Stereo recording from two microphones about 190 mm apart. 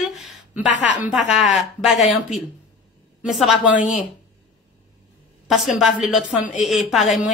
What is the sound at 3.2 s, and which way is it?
Speech, centre (ahead or behind).